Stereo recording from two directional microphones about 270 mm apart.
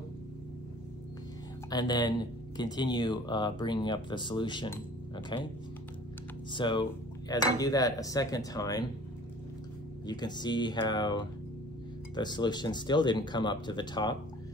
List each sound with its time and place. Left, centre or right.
1.7 s speech: centre
6.5 s speech: centre
10.0 s speech: centre